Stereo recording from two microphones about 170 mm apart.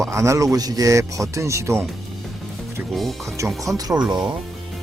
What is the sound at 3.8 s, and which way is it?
Speech, 20° right (ahead or behind).